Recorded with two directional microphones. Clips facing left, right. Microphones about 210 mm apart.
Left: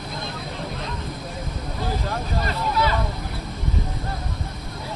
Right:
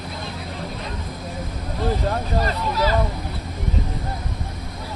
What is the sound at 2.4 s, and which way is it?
Speech, 40° right (ahead or behind).